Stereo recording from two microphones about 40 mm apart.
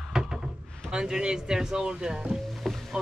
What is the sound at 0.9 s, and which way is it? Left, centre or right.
Speech, centre.